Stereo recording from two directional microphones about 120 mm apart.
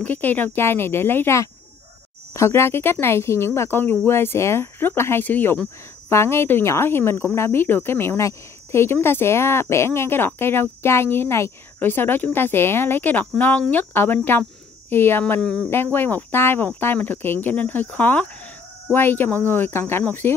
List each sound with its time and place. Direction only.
0.0 s speech: 15° left (ahead or behind)